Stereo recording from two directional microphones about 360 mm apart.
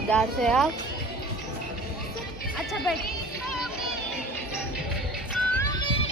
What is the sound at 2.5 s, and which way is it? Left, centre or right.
Speech, centre.